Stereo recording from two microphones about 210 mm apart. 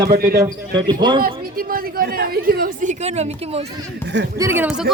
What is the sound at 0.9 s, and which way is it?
Speech, 20° right (ahead or behind).